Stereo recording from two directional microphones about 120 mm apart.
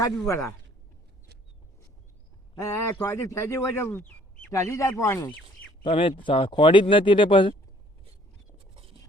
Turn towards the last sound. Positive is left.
turn(degrees=45)  # may be behind; listen again after turning